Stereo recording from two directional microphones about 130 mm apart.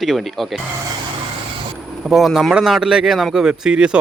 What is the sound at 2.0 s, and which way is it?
Speech, centre (ahead or behind).